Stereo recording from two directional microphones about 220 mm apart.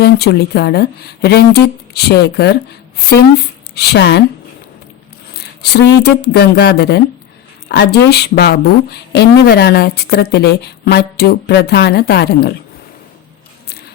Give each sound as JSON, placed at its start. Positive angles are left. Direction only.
{"t": 0.0, "sound": "a woman's voice", "side_deg": 45}
{"t": 5.3, "sound": "a woman's voice", "side_deg": 45}